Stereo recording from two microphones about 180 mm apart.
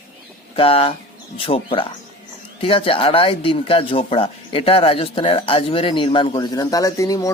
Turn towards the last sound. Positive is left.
turn(degrees=20)  # may be behind; listen again after turning